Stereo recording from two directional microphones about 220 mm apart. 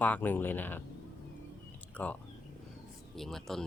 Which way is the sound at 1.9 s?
5° left (ahead or behind).